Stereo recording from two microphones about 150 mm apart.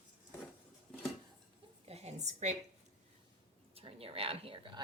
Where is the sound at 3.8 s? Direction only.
40° right (ahead or behind).